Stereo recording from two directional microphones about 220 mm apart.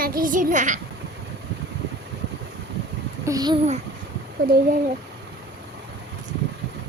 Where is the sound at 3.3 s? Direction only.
15° right (ahead or behind).